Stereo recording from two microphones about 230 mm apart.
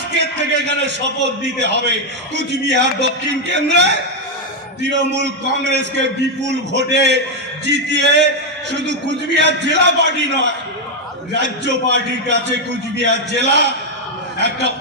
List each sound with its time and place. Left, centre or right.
0.2 s a man's voice: right